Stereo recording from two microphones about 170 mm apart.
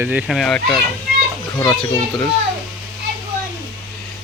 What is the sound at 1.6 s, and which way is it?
Speech, 20° left (ahead or behind).